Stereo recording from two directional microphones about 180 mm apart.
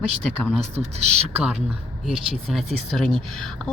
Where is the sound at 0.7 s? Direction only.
35° right (ahead or behind).